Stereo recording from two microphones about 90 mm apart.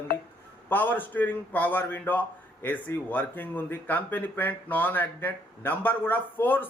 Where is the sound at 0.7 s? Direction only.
20° left (ahead or behind).